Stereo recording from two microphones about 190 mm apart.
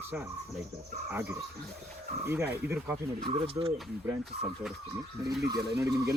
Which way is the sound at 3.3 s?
30° right (ahead or behind).